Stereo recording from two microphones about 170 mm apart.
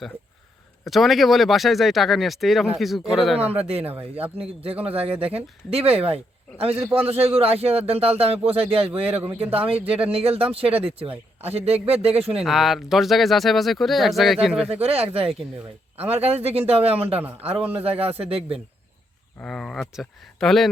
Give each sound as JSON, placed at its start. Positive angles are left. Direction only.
{"t": 0.9, "sound": "speech", "side_deg": 0}
{"t": 4.1, "sound": "speech", "side_deg": -35}
{"t": 12.5, "sound": "speech", "side_deg": 0}
{"t": 14.7, "sound": "speech", "side_deg": -35}
{"t": 19.4, "sound": "speech", "side_deg": 5}